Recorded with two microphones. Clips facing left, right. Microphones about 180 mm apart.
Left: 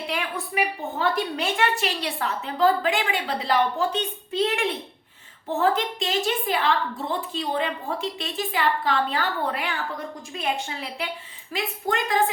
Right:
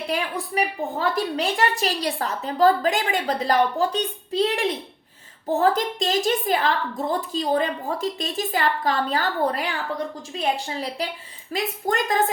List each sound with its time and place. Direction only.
0.1 s a woman's voice: 35° right (ahead or behind)